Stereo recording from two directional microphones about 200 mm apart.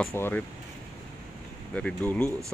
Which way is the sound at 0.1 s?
10° left (ahead or behind).